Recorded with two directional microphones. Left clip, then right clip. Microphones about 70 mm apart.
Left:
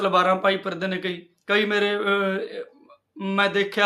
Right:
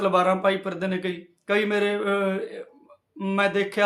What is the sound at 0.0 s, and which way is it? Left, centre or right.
A man's voice, right.